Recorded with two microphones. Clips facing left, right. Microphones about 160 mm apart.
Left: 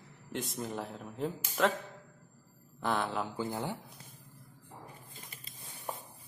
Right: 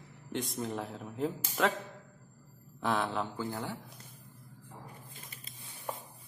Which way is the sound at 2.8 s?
Centre (ahead or behind).